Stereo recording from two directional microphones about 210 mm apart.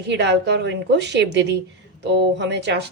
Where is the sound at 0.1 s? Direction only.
55° right (ahead or behind).